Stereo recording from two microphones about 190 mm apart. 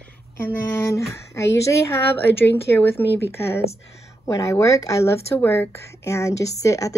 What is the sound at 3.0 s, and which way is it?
Speech, 65° left (ahead or behind).